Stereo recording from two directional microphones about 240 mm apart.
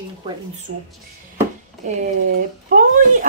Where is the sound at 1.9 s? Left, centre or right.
Right.